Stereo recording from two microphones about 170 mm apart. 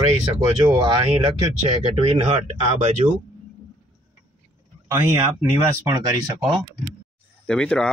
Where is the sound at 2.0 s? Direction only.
40° right (ahead or behind).